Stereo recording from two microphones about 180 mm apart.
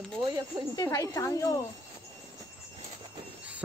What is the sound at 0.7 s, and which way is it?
Speech, 15° left (ahead or behind).